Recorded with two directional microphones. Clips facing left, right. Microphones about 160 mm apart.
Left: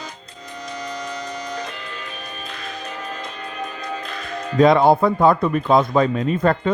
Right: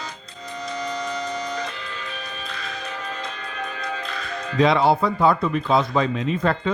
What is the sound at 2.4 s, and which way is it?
Music, 45° left (ahead or behind).